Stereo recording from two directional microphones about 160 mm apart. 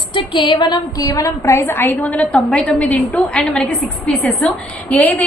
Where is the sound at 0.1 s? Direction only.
30° left (ahead or behind).